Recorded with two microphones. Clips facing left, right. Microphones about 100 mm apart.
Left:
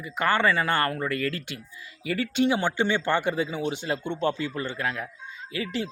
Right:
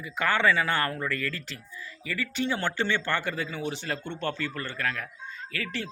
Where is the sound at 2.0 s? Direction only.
75° left (ahead or behind).